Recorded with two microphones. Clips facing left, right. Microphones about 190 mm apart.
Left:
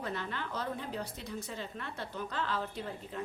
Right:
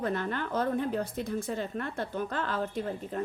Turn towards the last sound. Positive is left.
turn(degrees=-45)  # may be behind; listen again after turning